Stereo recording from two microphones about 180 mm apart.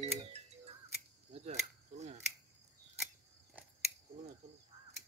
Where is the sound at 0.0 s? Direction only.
35° right (ahead or behind).